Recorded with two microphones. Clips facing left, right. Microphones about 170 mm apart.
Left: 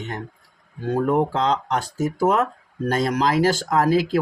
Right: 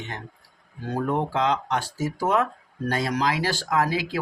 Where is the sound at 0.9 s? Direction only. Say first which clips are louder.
Left 5 dB; 40° left (ahead or behind).